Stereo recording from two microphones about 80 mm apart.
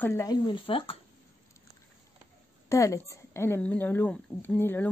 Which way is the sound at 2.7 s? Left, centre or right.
Left.